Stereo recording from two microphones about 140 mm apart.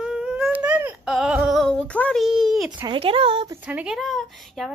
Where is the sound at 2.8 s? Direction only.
40° right (ahead or behind).